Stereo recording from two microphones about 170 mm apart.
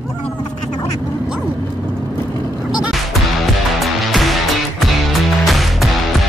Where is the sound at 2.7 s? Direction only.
5° right (ahead or behind).